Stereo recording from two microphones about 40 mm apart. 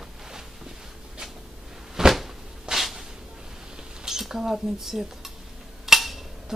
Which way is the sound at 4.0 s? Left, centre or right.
Centre.